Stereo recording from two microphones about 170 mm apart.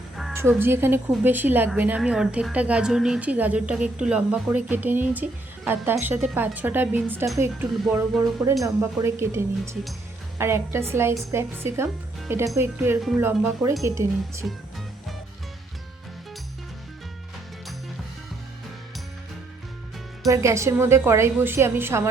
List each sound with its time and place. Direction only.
0.3 s a woman's voice: 15° right (ahead or behind)
14.4 s music: centre (ahead or behind)
20.2 s a woman's voice: 15° right (ahead or behind)